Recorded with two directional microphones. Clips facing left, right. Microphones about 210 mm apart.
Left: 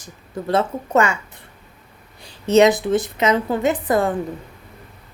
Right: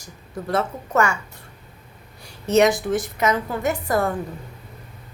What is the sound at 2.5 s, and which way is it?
A woman's voice, 20° left (ahead or behind).